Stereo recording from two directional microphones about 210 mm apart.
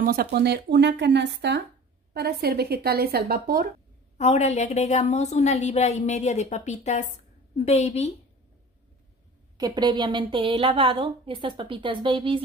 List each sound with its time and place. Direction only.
0.0 s speech: 45° right (ahead or behind)
4.2 s a woman's voice: 30° left (ahead or behind)
9.6 s a woman's voice: 20° right (ahead or behind)